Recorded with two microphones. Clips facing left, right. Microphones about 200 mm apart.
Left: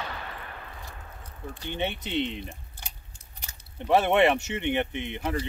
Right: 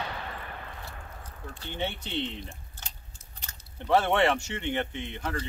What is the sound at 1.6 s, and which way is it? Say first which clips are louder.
Speech: left 3 dB; 15° left (ahead or behind).